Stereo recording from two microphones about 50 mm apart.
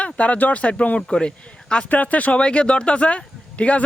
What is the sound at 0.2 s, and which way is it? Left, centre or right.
Speech, left.